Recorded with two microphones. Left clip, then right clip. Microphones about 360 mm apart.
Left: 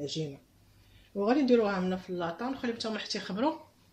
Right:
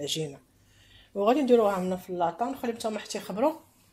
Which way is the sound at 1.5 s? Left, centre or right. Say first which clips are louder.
Right 4 dB; right.